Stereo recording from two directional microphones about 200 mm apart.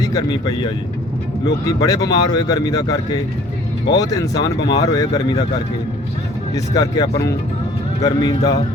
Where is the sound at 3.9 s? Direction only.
20° left (ahead or behind).